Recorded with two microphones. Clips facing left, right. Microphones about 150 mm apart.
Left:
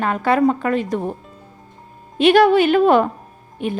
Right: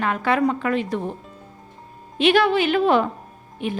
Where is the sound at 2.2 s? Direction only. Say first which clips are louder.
Left 5 dB; 45° left (ahead or behind).